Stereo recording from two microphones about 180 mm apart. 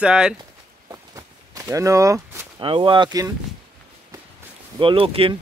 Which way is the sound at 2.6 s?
30° right (ahead or behind).